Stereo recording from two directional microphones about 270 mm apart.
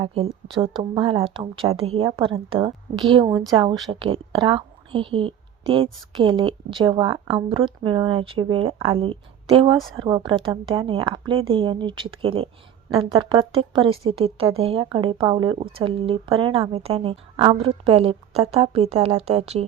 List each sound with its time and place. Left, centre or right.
0.0 s a woman's voice: right